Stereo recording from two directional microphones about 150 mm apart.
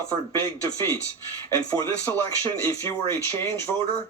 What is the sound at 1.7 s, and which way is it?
Speech, 20° left (ahead or behind).